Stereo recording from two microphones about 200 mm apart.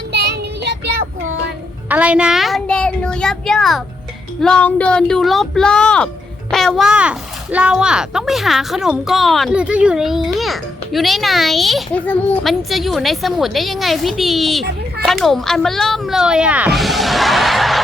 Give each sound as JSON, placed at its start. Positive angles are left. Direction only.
{"t": 0.1, "sound": "child singing", "side_deg": -55}
{"t": 1.9, "sound": "a child's voice", "side_deg": -5}